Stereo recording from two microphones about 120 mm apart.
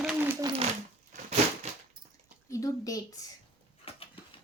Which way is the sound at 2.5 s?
25° left (ahead or behind).